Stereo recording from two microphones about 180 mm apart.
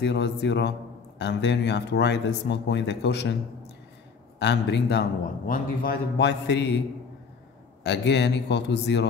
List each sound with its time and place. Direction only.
0.0 s speech: 75° left (ahead or behind)
4.4 s speech: 75° left (ahead or behind)
5.5 s speech: 55° left (ahead or behind); by 6.8 s 70° left (ahead or behind)
7.8 s speech: 70° left (ahead or behind)